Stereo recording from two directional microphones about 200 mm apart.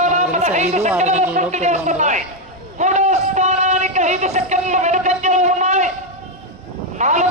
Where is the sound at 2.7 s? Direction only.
35° right (ahead or behind).